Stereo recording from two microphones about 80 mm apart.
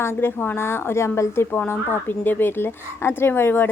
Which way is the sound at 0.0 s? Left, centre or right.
Left.